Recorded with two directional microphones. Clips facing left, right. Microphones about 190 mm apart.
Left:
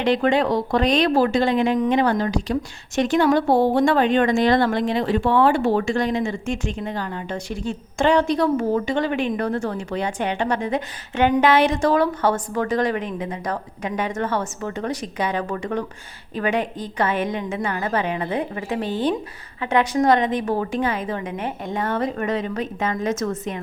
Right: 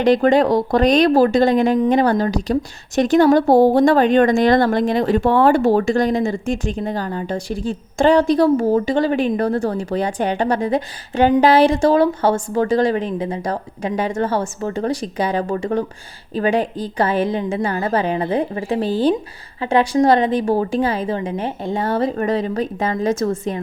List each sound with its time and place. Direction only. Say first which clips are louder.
0.0 s a woman's voice: right 5 dB; 40° right (ahead or behind)